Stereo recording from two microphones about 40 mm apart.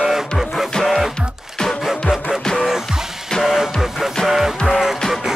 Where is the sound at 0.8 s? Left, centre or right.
Centre.